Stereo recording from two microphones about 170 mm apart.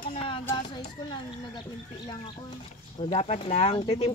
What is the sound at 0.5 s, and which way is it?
Speech, 25° left (ahead or behind).